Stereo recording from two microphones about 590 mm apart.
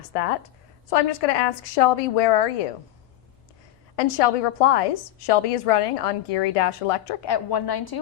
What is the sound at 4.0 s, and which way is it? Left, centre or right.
A woman's voice, left.